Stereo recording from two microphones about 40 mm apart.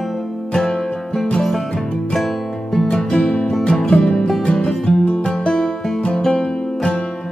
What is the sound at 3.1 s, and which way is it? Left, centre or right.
Music, centre.